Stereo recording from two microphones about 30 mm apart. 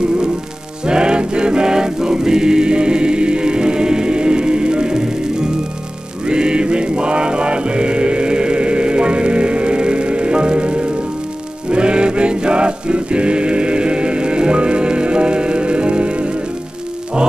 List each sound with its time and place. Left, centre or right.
0.8 s music: right